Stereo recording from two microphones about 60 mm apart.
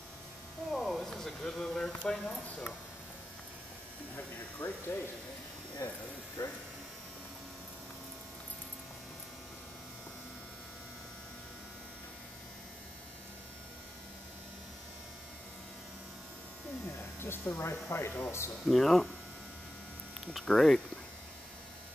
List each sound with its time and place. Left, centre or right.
0.7 s a sound: centre
4.6 s speech: left
5.8 s speech: left
17.2 s speech: left
18.7 s speech: centre
20.4 s speech: centre